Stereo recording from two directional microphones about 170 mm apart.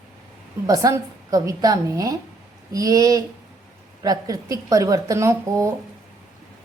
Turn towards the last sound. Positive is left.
turn(degrees=-15)  # may be behind; listen again after turning